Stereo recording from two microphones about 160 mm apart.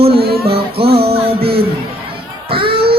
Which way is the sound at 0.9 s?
35° right (ahead or behind).